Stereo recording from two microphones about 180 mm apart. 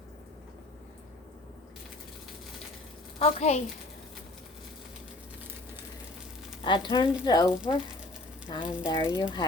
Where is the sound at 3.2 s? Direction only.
35° left (ahead or behind).